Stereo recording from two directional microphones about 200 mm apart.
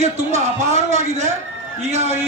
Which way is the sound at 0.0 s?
30° right (ahead or behind).